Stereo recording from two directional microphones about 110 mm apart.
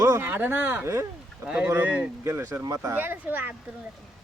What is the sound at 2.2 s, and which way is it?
Speech, 25° right (ahead or behind).